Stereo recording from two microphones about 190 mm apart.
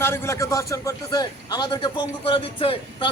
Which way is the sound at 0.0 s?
15° left (ahead or behind).